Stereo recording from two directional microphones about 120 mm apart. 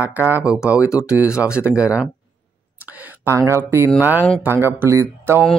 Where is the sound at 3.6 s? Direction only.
20° right (ahead or behind).